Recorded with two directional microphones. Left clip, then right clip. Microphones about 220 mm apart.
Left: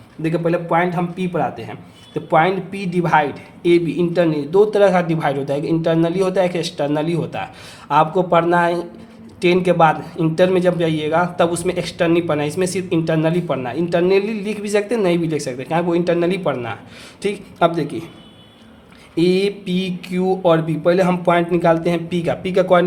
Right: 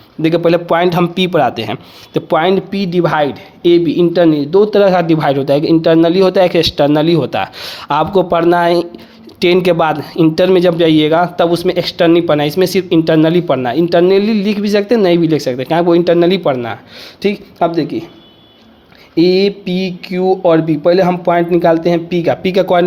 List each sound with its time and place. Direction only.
0.2 s a man's voice: 40° right (ahead or behind); by 18.1 s 20° right (ahead or behind)
19.1 s speech: 20° right (ahead or behind)